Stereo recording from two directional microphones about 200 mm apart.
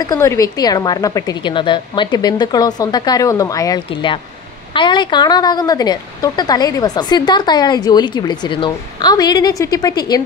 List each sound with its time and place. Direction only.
0.0 s speech: 15° left (ahead or behind)